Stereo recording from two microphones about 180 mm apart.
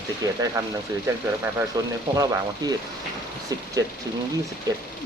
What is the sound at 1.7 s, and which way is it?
Speech, 20° right (ahead or behind).